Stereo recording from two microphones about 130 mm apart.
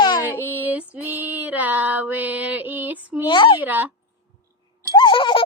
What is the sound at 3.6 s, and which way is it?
Female singing, 15° right (ahead or behind).